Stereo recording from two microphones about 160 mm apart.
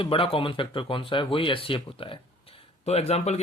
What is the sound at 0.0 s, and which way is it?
Speech, 35° left (ahead or behind).